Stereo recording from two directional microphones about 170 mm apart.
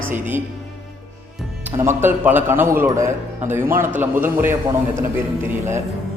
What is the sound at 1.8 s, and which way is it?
Speech, 10° right (ahead or behind).